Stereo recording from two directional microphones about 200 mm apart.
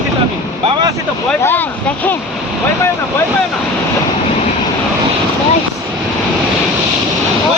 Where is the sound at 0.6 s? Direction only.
20° right (ahead or behind).